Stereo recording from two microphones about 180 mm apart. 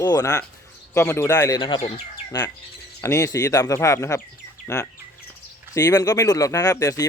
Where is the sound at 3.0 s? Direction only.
15° left (ahead or behind).